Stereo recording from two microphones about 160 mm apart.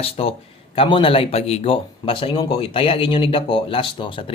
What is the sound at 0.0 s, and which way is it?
Speech, 35° left (ahead or behind).